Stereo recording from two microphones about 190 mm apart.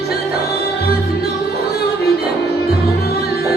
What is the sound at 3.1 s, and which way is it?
Music, 60° left (ahead or behind).